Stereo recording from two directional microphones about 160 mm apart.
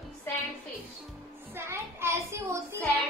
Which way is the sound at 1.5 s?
15° right (ahead or behind).